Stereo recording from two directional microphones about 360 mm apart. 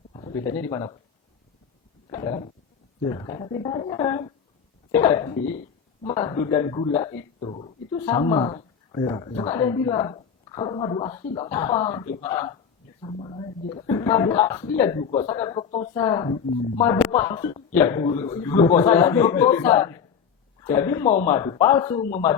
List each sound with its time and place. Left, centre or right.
0.1 s speech: centre
2.0 s a sound: centre
3.0 s speech: centre
17.3 s speech: centre
19.0 s speech: centre
21.1 s speech: centre